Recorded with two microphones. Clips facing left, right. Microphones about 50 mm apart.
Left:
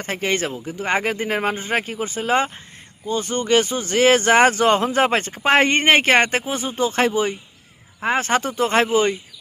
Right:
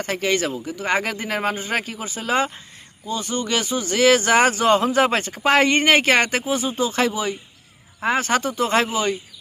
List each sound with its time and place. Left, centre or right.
0.0 s speech: left